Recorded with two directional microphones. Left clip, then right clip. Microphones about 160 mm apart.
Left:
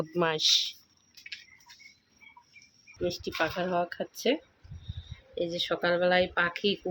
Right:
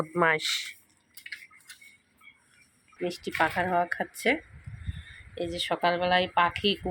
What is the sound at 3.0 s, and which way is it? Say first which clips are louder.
Speech: right 3 dB; 10° left (ahead or behind).